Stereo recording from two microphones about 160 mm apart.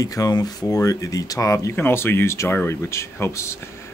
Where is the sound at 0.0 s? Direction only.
20° left (ahead or behind).